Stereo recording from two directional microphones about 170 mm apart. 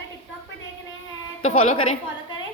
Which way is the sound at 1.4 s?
40° left (ahead or behind).